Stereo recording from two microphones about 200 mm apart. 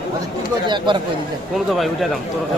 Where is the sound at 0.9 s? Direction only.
25° right (ahead or behind).